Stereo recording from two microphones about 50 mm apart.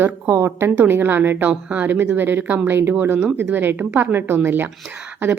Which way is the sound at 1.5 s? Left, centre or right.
Right.